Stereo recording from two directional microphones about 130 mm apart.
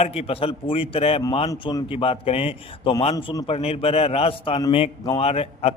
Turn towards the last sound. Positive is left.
turn(degrees=50)  # may be behind; listen again after turning